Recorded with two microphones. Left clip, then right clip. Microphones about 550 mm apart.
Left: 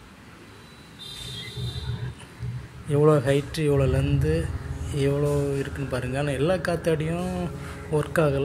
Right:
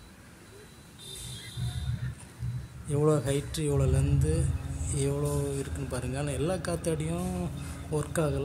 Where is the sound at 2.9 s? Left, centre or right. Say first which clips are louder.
Left 7 dB; right.